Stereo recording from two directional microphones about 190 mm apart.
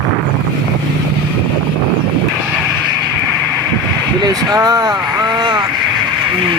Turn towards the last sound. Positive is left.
turn(degrees=-25)  # may be behind; listen again after turning